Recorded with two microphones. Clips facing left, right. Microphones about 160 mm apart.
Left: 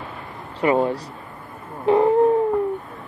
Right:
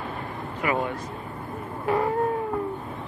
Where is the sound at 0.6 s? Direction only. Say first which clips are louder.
Left 8 dB; 30° left (ahead or behind).